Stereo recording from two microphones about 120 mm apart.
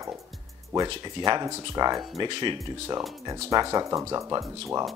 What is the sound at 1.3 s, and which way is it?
Speech, 35° right (ahead or behind).